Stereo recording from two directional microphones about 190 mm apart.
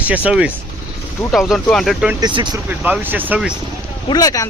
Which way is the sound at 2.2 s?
25° right (ahead or behind).